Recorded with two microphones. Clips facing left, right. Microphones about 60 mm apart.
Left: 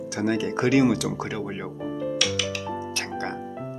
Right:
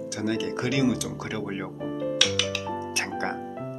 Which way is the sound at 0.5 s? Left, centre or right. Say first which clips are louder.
Left 9 dB; left.